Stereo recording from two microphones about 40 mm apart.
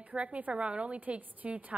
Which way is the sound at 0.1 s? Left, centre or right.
Right.